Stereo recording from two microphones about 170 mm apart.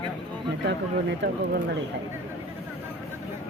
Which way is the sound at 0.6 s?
80° right.